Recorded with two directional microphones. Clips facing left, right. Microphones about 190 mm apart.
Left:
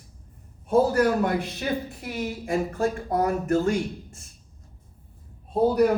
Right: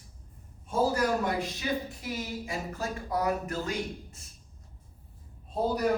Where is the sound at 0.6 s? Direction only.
60° left (ahead or behind).